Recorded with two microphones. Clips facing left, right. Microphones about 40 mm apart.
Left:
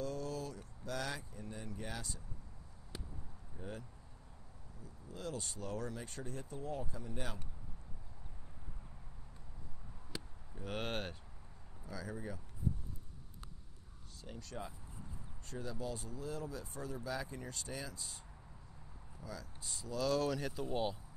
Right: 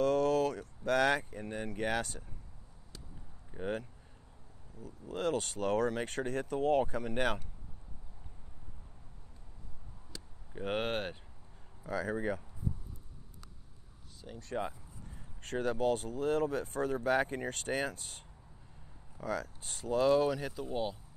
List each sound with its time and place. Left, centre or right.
0.0 s speech: right
3.5 s speech: right
4.8 s speech: right
10.1 s a sound: centre
10.5 s speech: right
10.8 s speech: right
11.8 s speech: right
14.3 s speech: centre
15.4 s speech: right
20.2 s speech: centre